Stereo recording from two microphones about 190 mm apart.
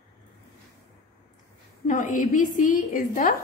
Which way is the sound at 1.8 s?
40° left (ahead or behind).